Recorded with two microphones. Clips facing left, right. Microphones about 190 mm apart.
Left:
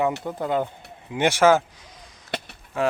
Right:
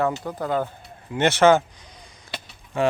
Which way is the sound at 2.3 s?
60° left (ahead or behind).